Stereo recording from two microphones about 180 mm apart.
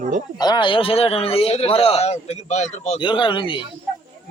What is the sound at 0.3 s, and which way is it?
Speech, 25° left (ahead or behind).